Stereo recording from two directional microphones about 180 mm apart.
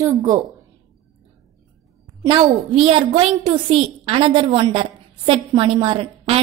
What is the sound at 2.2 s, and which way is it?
A child's voice, 30° right (ahead or behind).